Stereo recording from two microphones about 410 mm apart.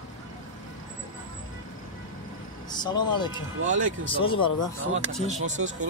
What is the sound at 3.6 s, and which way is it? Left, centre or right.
Speech, right.